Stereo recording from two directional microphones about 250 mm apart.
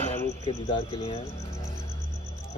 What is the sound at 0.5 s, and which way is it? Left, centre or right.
Speech, left.